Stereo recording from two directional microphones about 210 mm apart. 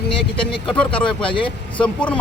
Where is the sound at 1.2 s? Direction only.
25° left (ahead or behind).